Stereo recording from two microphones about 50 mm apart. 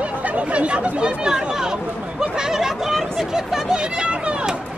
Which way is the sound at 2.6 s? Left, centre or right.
Centre.